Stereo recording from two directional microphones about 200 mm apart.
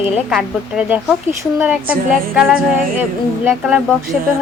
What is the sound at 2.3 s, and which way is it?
Speech, 5° right (ahead or behind).